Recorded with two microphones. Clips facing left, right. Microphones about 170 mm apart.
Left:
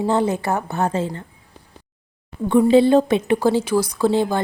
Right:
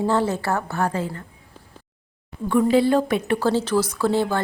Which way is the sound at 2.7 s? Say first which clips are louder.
Left 5 dB; 25° left (ahead or behind).